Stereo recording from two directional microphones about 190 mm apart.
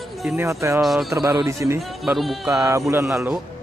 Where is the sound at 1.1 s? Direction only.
15° right (ahead or behind).